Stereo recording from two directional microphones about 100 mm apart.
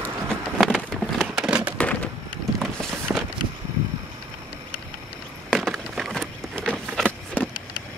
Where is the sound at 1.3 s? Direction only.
10° right (ahead or behind).